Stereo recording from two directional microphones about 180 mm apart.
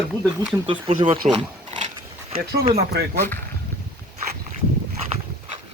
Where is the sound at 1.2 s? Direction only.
40° right (ahead or behind).